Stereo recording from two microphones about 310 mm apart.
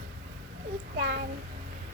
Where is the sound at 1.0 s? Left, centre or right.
Right.